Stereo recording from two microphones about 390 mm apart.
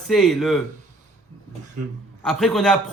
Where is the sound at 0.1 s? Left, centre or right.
Centre.